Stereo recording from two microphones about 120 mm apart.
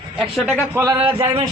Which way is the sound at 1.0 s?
45° right (ahead or behind).